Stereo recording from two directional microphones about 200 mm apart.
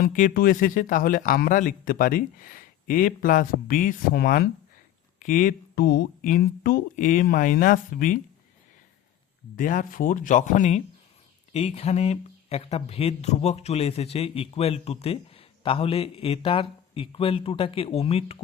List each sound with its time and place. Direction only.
0.0 s speech: 45° left (ahead or behind)
9.6 s speech: 40° left (ahead or behind)